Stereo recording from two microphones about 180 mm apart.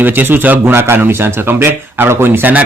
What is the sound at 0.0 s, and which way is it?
Speech, 10° right (ahead or behind).